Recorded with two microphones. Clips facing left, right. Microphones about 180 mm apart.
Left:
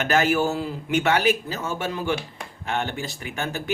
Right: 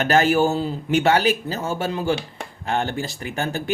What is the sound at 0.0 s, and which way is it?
A man's voice, 30° right (ahead or behind).